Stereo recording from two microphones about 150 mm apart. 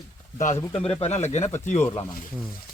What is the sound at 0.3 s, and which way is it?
Speech, 55° left (ahead or behind).